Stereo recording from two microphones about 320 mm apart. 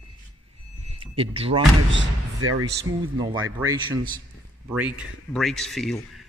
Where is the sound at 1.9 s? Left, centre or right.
Right.